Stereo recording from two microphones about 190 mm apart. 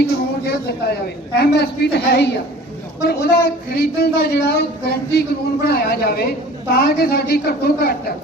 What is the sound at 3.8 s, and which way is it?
Speech, 55° left (ahead or behind).